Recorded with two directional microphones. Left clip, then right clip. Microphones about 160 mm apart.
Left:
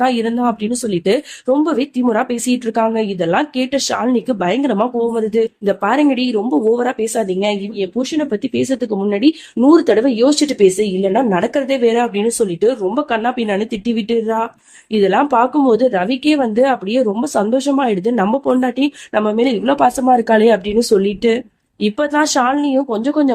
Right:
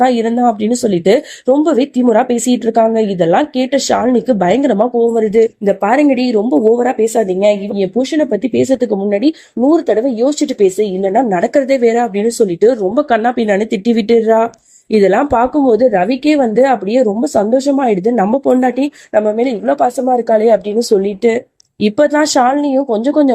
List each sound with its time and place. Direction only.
0.0 s speech: 10° right (ahead or behind)
15.2 s speech: centre (ahead or behind)
21.8 s speech: 20° right (ahead or behind)
22.1 s speech: 10° right (ahead or behind)